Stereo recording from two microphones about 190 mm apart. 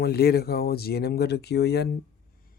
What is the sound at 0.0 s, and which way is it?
Speech, 55° left (ahead or behind).